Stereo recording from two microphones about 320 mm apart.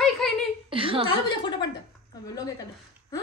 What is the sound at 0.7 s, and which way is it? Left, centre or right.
Speech, centre.